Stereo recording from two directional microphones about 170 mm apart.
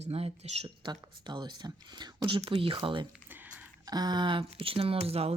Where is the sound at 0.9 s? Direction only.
25° right (ahead or behind).